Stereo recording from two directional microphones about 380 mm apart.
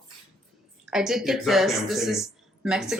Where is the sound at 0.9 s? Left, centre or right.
Centre.